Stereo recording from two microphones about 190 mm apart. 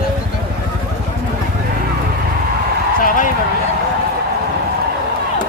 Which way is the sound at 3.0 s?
45° left (ahead or behind).